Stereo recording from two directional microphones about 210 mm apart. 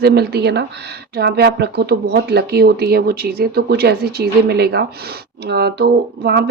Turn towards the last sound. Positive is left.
turn(degrees=-50)  # may be behind; listen again after turning